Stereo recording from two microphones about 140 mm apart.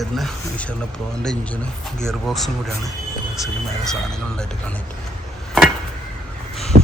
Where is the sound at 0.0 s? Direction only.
Centre (ahead or behind).